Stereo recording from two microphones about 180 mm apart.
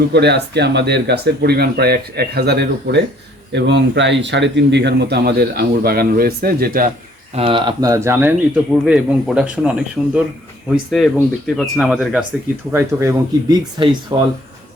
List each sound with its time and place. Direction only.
0.1 s speech: 65° right (ahead or behind)
3.5 s a man's voice: 75° right (ahead or behind); by 6.9 s 55° right (ahead or behind)
7.3 s speech: 30° right (ahead or behind); by 12.2 s centre (ahead or behind)
12.7 s speech: 15° right (ahead or behind)